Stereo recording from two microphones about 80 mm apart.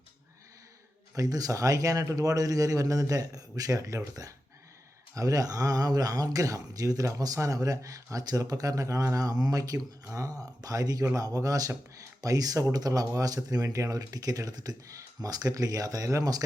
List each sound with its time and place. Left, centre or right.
1.1 s speech: right